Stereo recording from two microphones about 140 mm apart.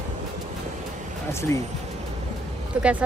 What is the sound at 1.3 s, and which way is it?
Speech, 20° left (ahead or behind).